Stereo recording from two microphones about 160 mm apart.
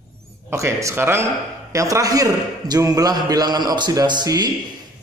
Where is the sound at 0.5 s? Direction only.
15° right (ahead or behind).